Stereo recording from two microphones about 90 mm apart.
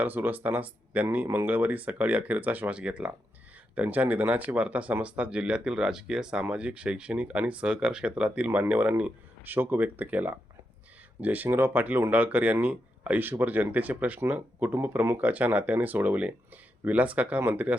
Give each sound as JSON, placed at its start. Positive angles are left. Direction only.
{"t": 0.0, "sound": "speech", "side_deg": -20}